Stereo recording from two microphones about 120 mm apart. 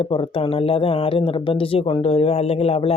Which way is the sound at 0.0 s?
50° left (ahead or behind).